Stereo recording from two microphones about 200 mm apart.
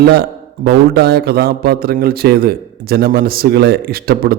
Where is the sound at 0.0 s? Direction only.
55° right (ahead or behind).